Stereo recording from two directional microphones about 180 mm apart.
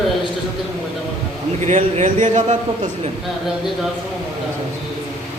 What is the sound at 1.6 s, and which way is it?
A man's voice, 40° right (ahead or behind).